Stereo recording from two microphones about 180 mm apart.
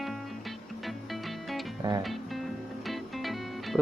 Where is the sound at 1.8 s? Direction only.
25° right (ahead or behind).